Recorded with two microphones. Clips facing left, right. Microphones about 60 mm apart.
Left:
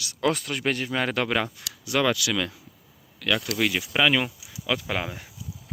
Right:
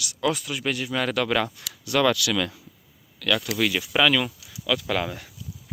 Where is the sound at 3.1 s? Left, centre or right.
Centre.